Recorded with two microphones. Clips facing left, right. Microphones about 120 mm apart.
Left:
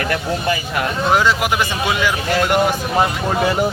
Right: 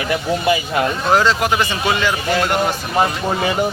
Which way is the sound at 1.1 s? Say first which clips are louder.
Right 1 dB; 10° left (ahead or behind).